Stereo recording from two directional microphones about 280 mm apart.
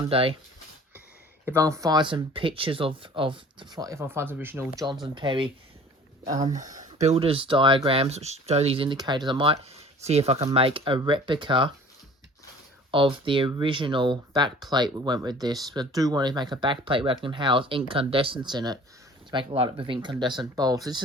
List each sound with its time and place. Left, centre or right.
0.0 s speech: centre
1.5 s speech: centre
12.9 s speech: centre